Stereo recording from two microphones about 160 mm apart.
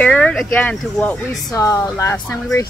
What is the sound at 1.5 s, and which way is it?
Speech, 20° left (ahead or behind).